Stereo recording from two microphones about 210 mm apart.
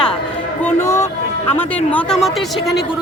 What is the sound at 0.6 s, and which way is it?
Speech, 15° left (ahead or behind).